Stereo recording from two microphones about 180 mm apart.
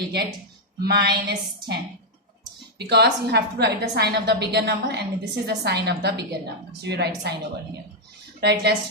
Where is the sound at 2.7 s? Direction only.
65° right (ahead or behind).